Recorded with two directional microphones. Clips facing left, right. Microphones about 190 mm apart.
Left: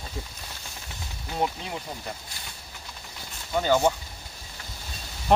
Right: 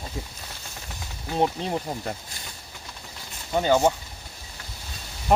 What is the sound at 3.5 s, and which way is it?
Speech, 20° right (ahead or behind).